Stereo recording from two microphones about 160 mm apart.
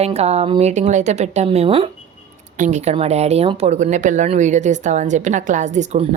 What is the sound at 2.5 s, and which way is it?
Speech, 50° right (ahead or behind).